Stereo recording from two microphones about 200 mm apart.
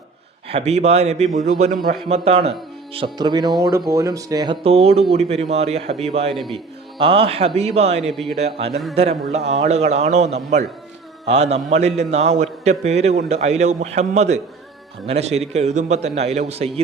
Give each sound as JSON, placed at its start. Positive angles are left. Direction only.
{"t": 0.4, "sound": "a man's voice", "side_deg": -30}
{"t": 6.3, "sound": "speech", "side_deg": 0}
{"t": 7.0, "sound": "a man's voice", "side_deg": -30}
{"t": 8.0, "sound": "speech", "side_deg": 0}
{"t": 9.0, "sound": "a man's voice", "side_deg": -30}